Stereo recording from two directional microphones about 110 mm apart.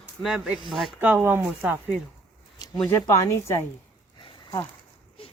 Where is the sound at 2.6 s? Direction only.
40° left (ahead or behind).